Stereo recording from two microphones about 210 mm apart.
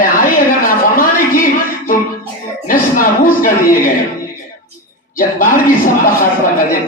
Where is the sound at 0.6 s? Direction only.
40° left (ahead or behind).